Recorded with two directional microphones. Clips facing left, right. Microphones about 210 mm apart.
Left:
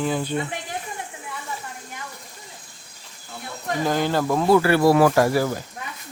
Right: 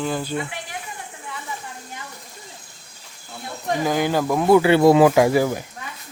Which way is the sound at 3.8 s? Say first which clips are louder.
Right 1 dB; 10° right (ahead or behind).